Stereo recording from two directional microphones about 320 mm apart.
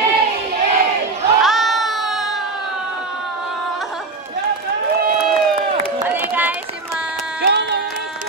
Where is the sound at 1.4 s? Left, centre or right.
Centre.